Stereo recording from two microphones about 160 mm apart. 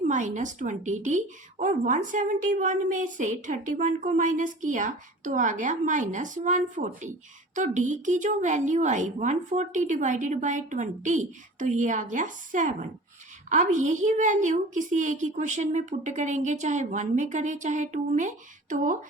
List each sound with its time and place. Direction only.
0.1 s a woman's voice: 50° right (ahead or behind)